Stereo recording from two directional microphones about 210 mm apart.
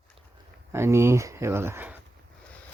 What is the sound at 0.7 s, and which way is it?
Speech, 10° right (ahead or behind).